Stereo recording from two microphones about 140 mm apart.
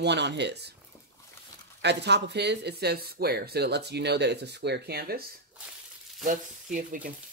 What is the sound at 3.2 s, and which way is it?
Speech, 90° right.